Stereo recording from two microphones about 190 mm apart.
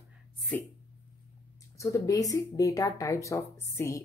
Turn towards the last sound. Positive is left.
turn(degrees=15)  # may be behind; listen again after turning